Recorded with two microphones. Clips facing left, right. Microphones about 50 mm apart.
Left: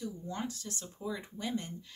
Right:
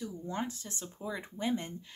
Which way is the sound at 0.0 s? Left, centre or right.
Right.